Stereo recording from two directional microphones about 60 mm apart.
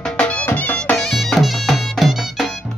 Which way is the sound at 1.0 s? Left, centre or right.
Centre.